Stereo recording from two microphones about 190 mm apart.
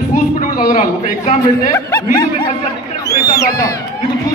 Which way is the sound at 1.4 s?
15° left (ahead or behind).